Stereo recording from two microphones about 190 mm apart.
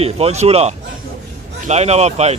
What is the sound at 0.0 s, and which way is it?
Speech, 35° right (ahead or behind).